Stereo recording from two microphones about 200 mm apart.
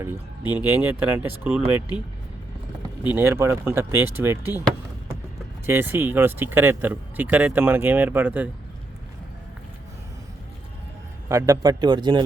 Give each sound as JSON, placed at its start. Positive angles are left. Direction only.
{"t": 0.0, "sound": "speech", "side_deg": -10}
{"t": 3.1, "sound": "speech", "side_deg": -10}
{"t": 5.6, "sound": "speech", "side_deg": -10}
{"t": 11.3, "sound": "a man's voice", "side_deg": -15}